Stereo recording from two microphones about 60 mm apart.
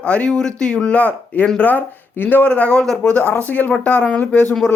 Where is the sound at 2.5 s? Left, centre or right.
Centre.